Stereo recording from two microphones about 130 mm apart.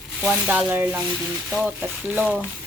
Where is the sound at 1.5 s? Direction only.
5° right (ahead or behind).